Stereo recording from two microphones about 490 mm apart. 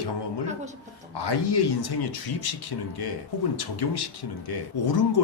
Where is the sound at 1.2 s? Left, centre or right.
Left.